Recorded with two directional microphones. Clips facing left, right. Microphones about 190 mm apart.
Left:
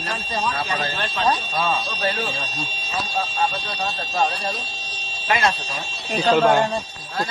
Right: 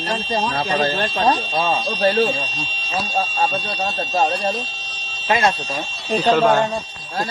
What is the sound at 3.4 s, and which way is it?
A man's voice, 40° right (ahead or behind).